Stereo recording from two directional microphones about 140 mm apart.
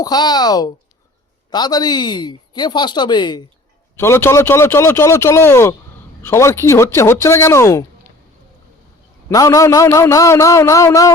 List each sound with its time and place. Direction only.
0.0 s speech: 30° left (ahead or behind)
3.9 s speech: 20° left (ahead or behind)
9.3 s speech: 25° left (ahead or behind)